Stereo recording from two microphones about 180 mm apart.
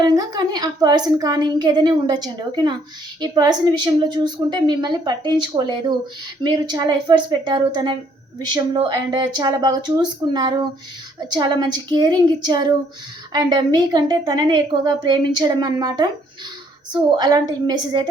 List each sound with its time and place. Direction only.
0.0 s a woman's voice: 20° right (ahead or behind)